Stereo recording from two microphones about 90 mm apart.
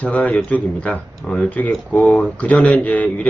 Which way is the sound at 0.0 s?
15° left (ahead or behind).